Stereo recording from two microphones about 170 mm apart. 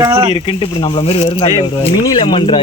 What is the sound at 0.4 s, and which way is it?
Speech, 30° left (ahead or behind).